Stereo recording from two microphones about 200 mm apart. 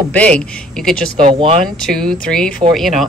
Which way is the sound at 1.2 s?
25° right (ahead or behind).